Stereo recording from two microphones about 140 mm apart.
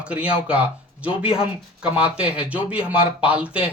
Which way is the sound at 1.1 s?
40° left (ahead or behind).